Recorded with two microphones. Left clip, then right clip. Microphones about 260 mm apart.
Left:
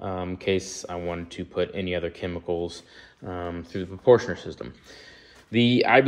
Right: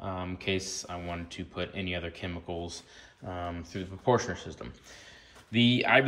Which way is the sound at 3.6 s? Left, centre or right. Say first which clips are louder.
Left 6 dB; left.